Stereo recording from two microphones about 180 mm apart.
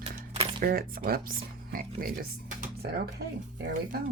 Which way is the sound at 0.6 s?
55° right (ahead or behind).